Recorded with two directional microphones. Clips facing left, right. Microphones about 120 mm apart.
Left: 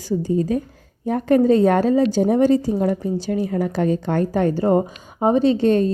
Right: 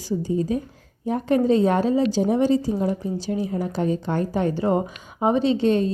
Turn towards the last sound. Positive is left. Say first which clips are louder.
# left 3 dB
turn(degrees=45)  # may be behind; listen again after turning